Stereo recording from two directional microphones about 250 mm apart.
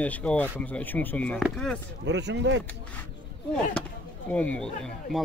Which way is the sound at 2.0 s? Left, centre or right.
Right.